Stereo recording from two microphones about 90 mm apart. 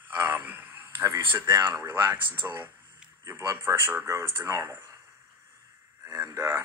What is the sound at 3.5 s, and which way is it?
Speech, 25° right (ahead or behind).